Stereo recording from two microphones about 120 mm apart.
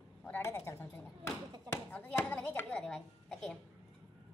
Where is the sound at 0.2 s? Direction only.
20° left (ahead or behind); by 3.5 s centre (ahead or behind).